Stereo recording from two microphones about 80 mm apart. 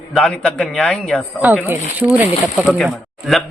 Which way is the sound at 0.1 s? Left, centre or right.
Centre.